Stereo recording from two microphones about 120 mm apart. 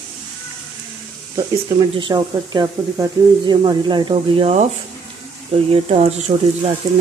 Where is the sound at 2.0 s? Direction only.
40° right (ahead or behind).